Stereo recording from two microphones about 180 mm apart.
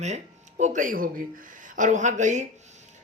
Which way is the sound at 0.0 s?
40° right (ahead or behind).